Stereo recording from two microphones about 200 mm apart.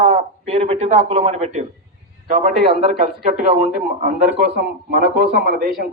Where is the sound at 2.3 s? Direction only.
45° right (ahead or behind).